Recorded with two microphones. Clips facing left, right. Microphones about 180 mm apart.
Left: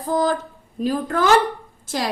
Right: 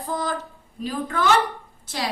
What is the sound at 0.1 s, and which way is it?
A woman's voice, 45° left (ahead or behind).